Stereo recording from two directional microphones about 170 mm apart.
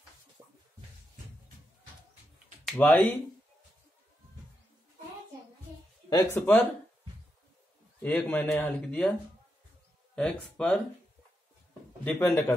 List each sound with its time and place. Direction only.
0.4 s music: 20° right (ahead or behind)
2.6 s speech: 5° left (ahead or behind)
6.0 s speech: 15° left (ahead or behind)
8.0 s speech: 10° left (ahead or behind)
10.1 s speech: 5° left (ahead or behind)
12.0 s speech: 10° left (ahead or behind)